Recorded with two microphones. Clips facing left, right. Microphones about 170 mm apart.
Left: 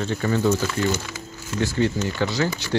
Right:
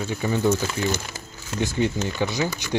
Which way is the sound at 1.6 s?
15° right (ahead or behind).